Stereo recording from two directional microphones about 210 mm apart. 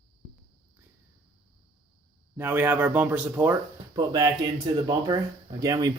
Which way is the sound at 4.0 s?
20° right (ahead or behind).